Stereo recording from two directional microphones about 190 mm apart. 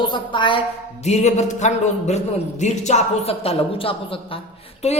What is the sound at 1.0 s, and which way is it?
A woman's voice, 35° left (ahead or behind).